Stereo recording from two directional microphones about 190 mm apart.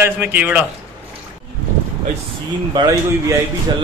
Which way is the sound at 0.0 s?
10° right (ahead or behind).